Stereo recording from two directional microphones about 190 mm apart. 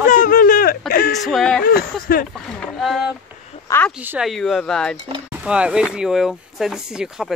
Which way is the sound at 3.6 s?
10° left (ahead or behind).